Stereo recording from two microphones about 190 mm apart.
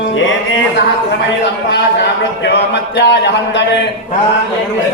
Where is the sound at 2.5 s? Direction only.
65° left (ahead or behind).